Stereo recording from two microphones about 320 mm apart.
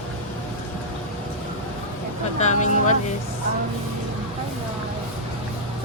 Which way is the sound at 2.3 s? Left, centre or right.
Left.